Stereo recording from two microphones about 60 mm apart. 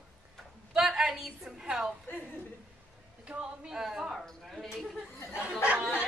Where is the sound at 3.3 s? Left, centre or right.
Centre.